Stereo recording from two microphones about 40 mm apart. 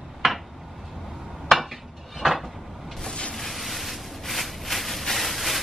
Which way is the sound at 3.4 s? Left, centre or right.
Centre.